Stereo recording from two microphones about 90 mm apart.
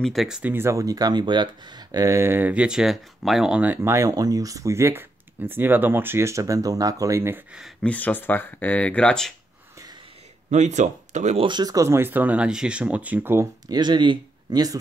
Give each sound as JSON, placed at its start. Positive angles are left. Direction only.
{"t": 0.0, "sound": "speech", "side_deg": 0}
{"t": 0.4, "sound": "speech", "side_deg": -25}
{"t": 3.6, "sound": "speech", "side_deg": -20}
{"t": 3.9, "sound": "speech", "side_deg": -40}
{"t": 7.8, "sound": "speech", "side_deg": 15}
{"t": 11.3, "sound": "speech", "side_deg": -65}
{"t": 11.6, "sound": "speech", "side_deg": -35}
{"t": 13.7, "sound": "speech", "side_deg": -55}